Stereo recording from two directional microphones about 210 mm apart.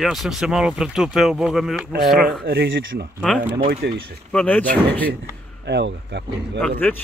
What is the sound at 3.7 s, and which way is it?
Speech, 50° right (ahead or behind).